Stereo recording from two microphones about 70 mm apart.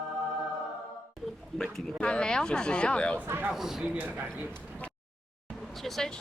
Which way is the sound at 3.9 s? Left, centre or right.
Right.